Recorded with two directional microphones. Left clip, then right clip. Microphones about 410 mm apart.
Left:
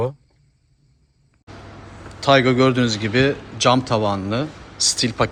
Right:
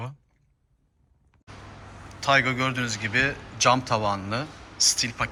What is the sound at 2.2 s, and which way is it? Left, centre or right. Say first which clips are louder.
A man's voice: left 7 dB; centre.